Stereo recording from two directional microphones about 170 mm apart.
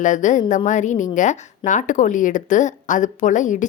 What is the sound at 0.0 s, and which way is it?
A woman's voice, 45° left (ahead or behind).